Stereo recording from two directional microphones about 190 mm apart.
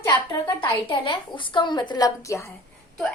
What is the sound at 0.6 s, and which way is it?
A woman's voice, 25° left (ahead or behind).